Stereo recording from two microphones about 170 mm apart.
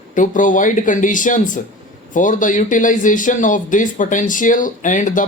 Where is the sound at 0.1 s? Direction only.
50° left (ahead or behind).